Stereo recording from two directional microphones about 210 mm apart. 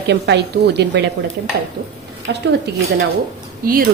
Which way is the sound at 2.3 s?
50° right (ahead or behind).